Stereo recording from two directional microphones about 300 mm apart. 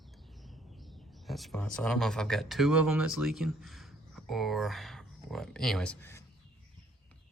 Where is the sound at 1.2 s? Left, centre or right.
Centre.